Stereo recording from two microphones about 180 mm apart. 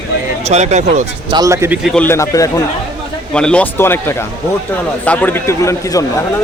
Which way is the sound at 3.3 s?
5° left (ahead or behind).